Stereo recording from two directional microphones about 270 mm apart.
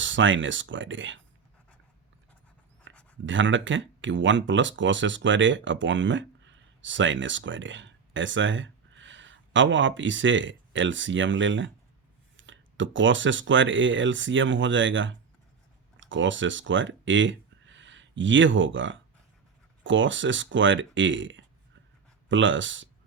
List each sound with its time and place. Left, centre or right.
0.0 s speech: right
2.9 s a sound: right
3.2 s speech: right